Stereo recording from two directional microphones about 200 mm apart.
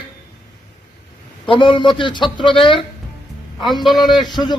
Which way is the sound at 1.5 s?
25° left (ahead or behind).